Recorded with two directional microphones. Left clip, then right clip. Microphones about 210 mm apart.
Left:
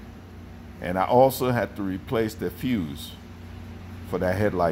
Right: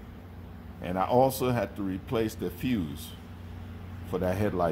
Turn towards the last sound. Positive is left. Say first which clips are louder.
# left 5 dB
turn(degrees=25)  # may be behind; listen again after turning